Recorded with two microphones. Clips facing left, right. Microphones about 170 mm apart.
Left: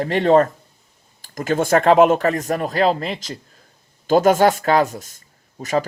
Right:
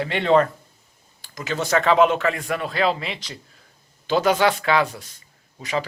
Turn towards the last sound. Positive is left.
turn(degrees=45)  # may be behind; listen again after turning